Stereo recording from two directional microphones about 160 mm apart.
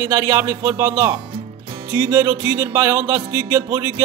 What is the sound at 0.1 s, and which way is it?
Music, 20° right (ahead or behind).